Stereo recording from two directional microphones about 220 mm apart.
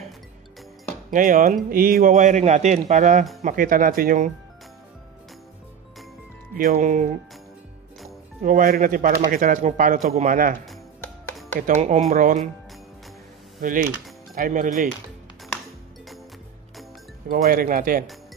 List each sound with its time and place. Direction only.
1.1 s a man's voice: 35° right (ahead or behind)
6.5 s a man's voice: 40° right (ahead or behind)
8.4 s a man's voice: 40° right (ahead or behind)
11.6 s a man's voice: 35° right (ahead or behind)
13.6 s cutlery: 40° right (ahead or behind)
14.3 s a man's voice: 40° right (ahead or behind)
17.3 s a man's voice: 40° right (ahead or behind)